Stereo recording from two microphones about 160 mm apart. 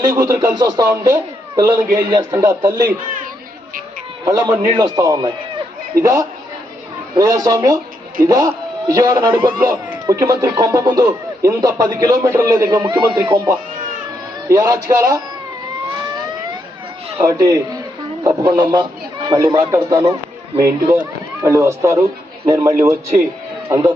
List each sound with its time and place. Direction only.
0.0 s speech: 20° right (ahead or behind)
4.3 s a man's voice: 20° right (ahead or behind)
17.2 s speech: 25° right (ahead or behind)
21.4 s speech: 20° right (ahead or behind)